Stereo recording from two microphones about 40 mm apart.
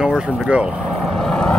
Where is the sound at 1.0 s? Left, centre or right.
Centre.